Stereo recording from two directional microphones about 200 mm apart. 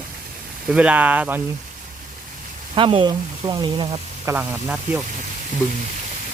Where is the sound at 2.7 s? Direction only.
25° right (ahead or behind).